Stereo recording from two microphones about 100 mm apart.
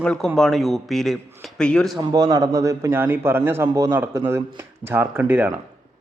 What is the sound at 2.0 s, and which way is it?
A man's voice, 45° right (ahead or behind).